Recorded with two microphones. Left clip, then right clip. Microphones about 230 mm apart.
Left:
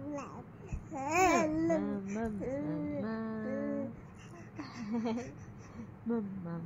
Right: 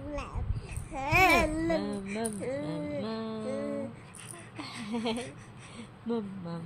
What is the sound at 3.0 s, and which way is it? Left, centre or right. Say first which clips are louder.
Music: right 3 dB; right.